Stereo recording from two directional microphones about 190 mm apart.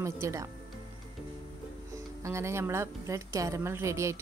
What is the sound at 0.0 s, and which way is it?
Speech, 15° right (ahead or behind).